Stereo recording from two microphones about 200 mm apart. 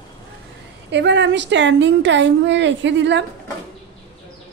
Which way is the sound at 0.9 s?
60° right (ahead or behind).